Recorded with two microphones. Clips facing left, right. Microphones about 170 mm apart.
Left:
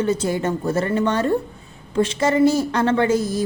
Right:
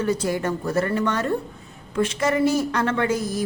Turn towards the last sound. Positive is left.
turn(degrees=30)  # may be behind; listen again after turning